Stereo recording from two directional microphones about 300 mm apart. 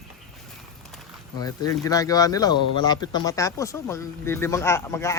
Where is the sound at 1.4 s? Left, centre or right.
Centre.